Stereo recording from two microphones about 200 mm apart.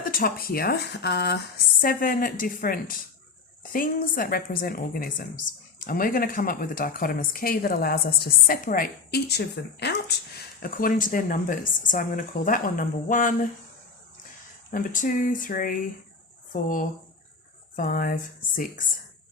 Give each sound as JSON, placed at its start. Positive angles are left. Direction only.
{"t": 0.1, "sound": "a woman's voice", "side_deg": 45}
{"t": 1.8, "sound": "a woman's voice", "side_deg": 45}
{"t": 14.7, "sound": "a woman's voice", "side_deg": 40}